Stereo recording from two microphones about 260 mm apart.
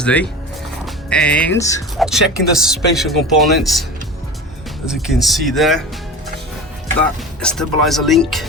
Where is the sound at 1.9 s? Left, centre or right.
Centre.